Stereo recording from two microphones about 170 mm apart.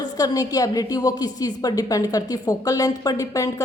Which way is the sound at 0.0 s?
20° left (ahead or behind).